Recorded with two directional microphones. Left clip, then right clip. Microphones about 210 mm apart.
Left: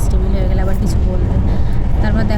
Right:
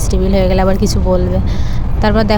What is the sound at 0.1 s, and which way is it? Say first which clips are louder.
Speech: right 12 dB; 35° right (ahead or behind).